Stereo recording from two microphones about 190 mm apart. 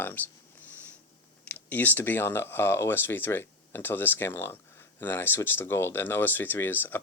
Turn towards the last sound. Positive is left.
turn(degrees=10)  # may be behind; listen again after turning